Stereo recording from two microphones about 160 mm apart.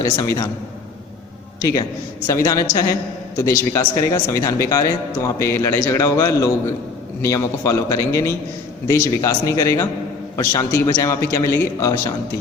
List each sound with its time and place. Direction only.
0.0 s a man's voice: 20° left (ahead or behind)
2.2 s a man's voice: 20° left (ahead or behind)